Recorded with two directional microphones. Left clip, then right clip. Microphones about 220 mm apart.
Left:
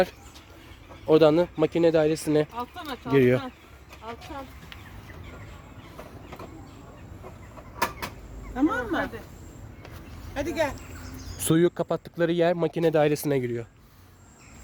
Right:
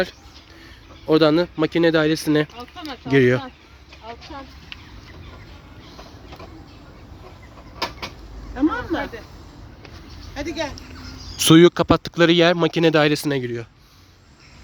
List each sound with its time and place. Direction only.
1.0 s speech: 5° right (ahead or behind)
4.0 s speech: 40° left (ahead or behind)
8.5 s speech: 50° left (ahead or behind)
10.3 s speech: 50° left (ahead or behind)
11.4 s speech: 15° right (ahead or behind)